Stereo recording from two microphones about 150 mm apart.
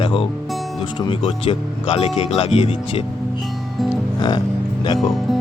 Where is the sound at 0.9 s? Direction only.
35° left (ahead or behind).